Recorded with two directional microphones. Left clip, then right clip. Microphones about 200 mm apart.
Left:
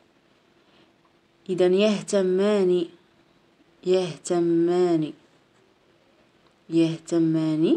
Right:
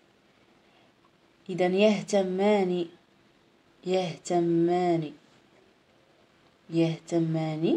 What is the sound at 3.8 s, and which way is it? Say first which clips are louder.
Speech: left 5 dB; 40° left (ahead or behind).